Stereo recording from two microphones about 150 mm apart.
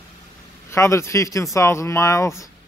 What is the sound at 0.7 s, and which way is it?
A man's voice, 20° left (ahead or behind).